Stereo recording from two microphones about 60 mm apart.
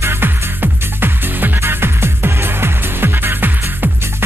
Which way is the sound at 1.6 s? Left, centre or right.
Right.